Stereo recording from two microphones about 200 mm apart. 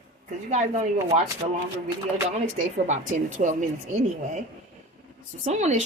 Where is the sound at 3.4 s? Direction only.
40° right (ahead or behind).